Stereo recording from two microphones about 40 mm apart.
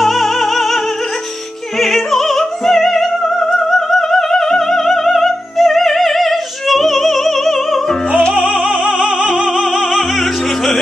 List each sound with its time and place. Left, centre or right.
0.0 s music: centre
1.8 s music: centre
8.4 s music: right
9.3 s music: centre